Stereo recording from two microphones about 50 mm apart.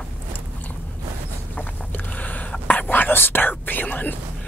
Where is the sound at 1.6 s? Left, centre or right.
Left.